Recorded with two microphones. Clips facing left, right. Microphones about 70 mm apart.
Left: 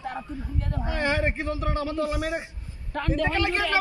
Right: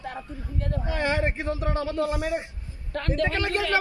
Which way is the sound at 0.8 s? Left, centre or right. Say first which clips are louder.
Even; left.